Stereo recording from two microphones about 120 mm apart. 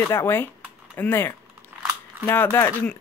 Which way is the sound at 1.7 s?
10° right (ahead or behind).